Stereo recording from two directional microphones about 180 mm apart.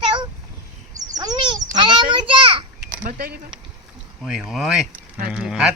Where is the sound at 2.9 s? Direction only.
50° right (ahead or behind).